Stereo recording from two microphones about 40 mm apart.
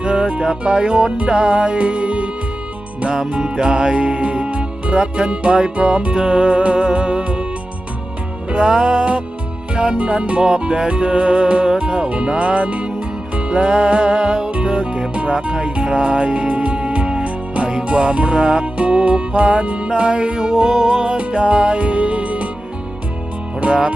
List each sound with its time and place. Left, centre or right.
0.0 s music: right
3.4 s music: centre
8.4 s music: right
21.2 s music: right